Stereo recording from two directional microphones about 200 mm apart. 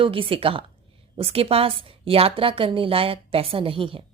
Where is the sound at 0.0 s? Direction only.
25° right (ahead or behind).